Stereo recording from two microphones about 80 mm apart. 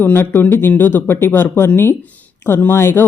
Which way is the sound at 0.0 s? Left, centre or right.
Left.